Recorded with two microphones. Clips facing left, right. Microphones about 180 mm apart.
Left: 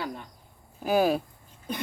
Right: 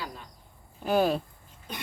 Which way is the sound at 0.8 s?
5° left (ahead or behind).